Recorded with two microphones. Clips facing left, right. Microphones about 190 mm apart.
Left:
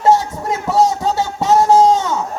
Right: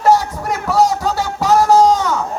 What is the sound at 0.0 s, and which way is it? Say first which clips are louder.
Music: even; 25° left (ahead or behind).